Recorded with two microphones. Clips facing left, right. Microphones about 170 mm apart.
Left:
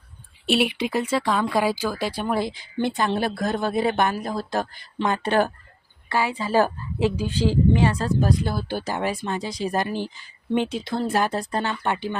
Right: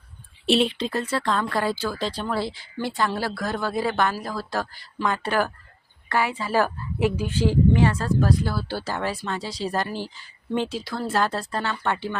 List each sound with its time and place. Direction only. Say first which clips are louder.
0.4 s speech: right 1 dB; centre (ahead or behind)
0.7 s speech: left 3 dB; 15° left (ahead or behind); by 7.3 s 30° left (ahead or behind)
7.7 s speech: even; 20° left (ahead or behind)